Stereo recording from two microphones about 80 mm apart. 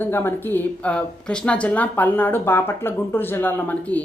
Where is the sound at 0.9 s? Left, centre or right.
Centre.